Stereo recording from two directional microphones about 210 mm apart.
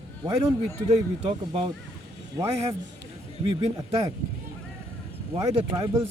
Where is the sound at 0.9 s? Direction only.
25° right (ahead or behind).